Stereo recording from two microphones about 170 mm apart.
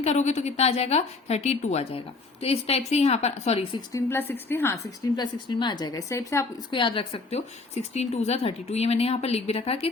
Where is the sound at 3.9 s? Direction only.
15° left (ahead or behind).